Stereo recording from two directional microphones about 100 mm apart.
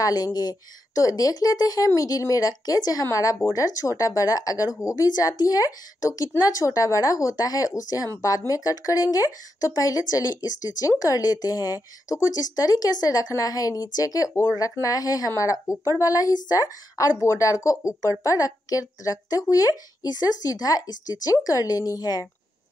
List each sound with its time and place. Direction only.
0.0 s speech: 40° left (ahead or behind)